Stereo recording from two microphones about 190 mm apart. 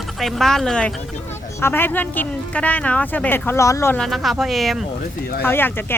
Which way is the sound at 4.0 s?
Centre (ahead or behind).